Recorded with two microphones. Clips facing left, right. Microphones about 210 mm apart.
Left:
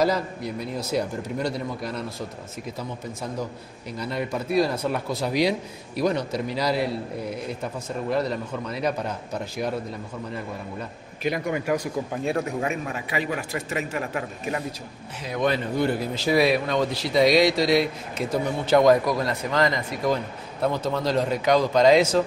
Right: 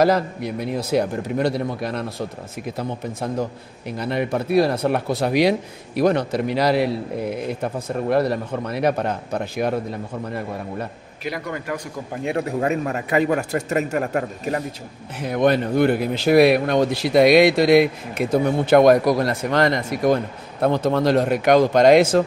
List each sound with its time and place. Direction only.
0.0 s speech: 65° right (ahead or behind)
11.2 s a man's voice: 20° left (ahead or behind)
12.4 s a man's voice: 40° right (ahead or behind)
15.2 s speech: 55° right (ahead or behind)